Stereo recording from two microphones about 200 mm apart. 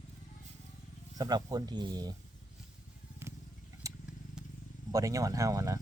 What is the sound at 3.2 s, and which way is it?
Vehicle, 10° right (ahead or behind).